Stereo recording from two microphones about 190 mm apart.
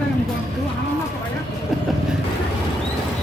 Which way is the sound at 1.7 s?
Centre (ahead or behind).